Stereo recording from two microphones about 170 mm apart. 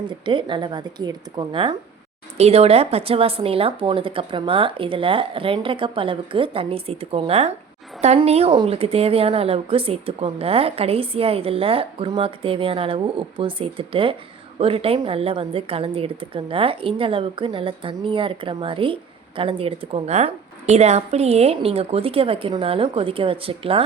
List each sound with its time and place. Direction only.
0.1 s a woman's voice: 30° right (ahead or behind)